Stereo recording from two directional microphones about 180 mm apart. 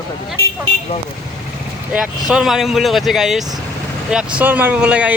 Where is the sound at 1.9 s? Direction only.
5° right (ahead or behind).